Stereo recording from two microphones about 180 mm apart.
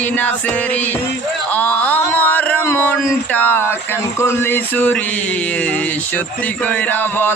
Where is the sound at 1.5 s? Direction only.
10° left (ahead or behind).